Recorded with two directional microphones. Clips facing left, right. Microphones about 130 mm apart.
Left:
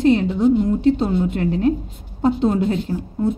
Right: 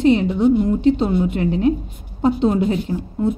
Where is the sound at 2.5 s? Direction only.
15° right (ahead or behind).